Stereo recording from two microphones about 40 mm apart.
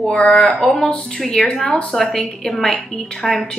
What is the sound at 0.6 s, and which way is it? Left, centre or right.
Speech, centre.